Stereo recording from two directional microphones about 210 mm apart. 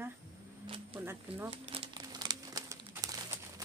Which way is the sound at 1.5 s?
25° right (ahead or behind).